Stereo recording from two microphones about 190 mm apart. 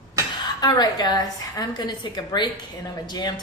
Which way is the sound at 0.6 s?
20° left (ahead or behind).